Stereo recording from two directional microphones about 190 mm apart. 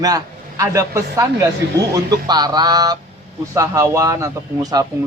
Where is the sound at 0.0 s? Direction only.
20° right (ahead or behind).